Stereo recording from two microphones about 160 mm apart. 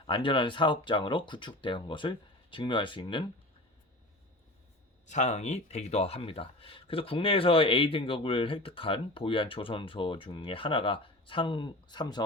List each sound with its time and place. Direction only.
0.1 s speech: 30° left (ahead or behind)
5.0 s speech: 45° left (ahead or behind); by 12.2 s 25° left (ahead or behind)